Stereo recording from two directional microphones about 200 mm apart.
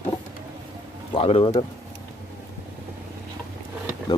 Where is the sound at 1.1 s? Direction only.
30° left (ahead or behind).